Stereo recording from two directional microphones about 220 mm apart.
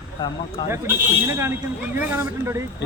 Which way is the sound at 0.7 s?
10° right (ahead or behind).